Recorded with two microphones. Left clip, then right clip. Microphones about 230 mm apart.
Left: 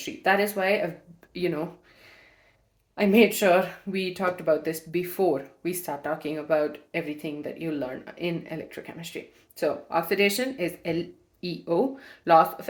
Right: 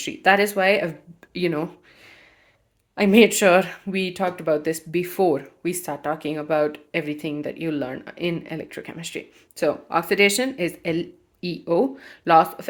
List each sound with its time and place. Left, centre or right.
0.0 s speech: right
2.9 s speech: right